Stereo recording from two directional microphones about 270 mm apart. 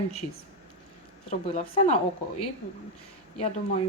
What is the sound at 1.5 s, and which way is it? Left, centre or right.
Speech, left.